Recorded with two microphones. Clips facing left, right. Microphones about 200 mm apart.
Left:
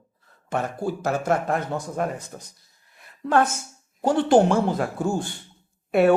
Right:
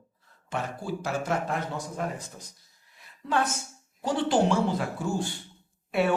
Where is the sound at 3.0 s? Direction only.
55° left (ahead or behind).